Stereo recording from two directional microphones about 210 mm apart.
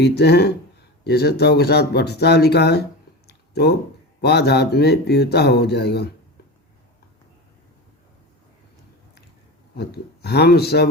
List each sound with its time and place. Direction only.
0.0 s speech: 50° left (ahead or behind)
3.2 s a sound: 50° left (ahead or behind)
4.2 s speech: 50° left (ahead or behind)
9.7 s speech: 50° left (ahead or behind)